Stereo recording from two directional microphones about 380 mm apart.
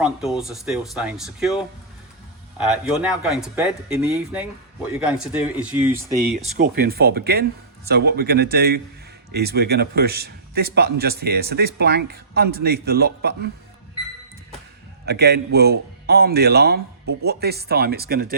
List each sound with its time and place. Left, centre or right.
0.0 s speech: centre
2.6 s speech: centre
6.4 s a man's voice: centre
15.0 s a man's voice: right